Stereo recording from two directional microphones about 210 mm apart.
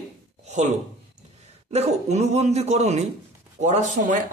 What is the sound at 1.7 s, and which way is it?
A man's voice, 30° right (ahead or behind).